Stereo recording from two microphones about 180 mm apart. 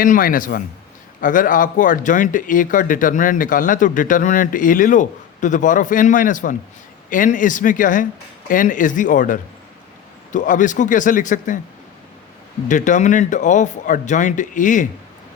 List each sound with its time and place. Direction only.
0.0 s speech: 50° left (ahead or behind)
12.6 s speech: 45° left (ahead or behind)